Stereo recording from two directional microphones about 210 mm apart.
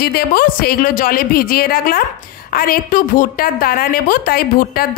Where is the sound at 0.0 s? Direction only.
45° left (ahead or behind).